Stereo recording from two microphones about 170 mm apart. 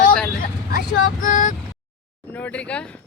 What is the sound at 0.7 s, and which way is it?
Vehicle, 55° left (ahead or behind).